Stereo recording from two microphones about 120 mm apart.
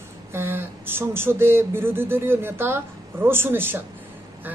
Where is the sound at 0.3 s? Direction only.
20° right (ahead or behind).